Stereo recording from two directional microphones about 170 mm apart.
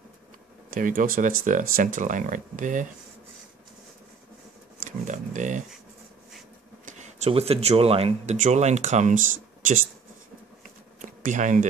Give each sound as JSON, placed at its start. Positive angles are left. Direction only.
{"t": 0.7, "sound": "speech", "side_deg": -55}
{"t": 4.7, "sound": "a sound", "side_deg": -45}
{"t": 6.9, "sound": "speech", "side_deg": -40}
{"t": 11.0, "sound": "bee", "side_deg": -45}